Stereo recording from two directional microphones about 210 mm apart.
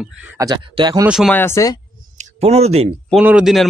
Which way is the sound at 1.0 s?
5° right (ahead or behind).